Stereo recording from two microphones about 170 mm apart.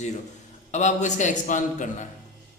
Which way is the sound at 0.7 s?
45° left (ahead or behind).